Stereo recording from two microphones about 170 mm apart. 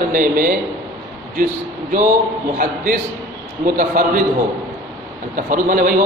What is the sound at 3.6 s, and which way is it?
Speech, 55° right (ahead or behind).